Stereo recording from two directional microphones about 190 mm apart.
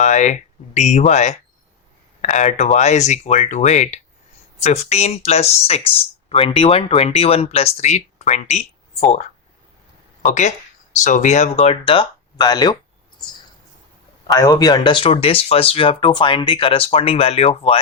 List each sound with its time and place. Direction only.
0.0 s speech: 40° left (ahead or behind)
10.2 s speech: 40° left (ahead or behind); by 12.7 s 20° left (ahead or behind)
14.3 s speech: 20° left (ahead or behind)